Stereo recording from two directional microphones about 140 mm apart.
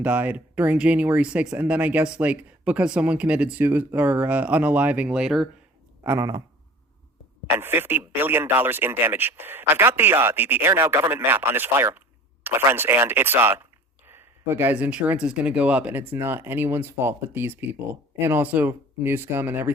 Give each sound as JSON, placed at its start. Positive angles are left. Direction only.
{"t": 0.0, "sound": "speech", "side_deg": -10}
{"t": 6.0, "sound": "speech", "side_deg": -20}
{"t": 7.5, "sound": "speech", "side_deg": -15}